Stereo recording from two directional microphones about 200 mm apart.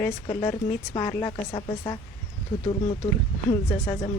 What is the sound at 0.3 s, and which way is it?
A woman's voice, 25° left (ahead or behind).